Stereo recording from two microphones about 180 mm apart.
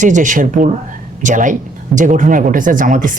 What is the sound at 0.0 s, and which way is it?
Speech, 45° right (ahead or behind).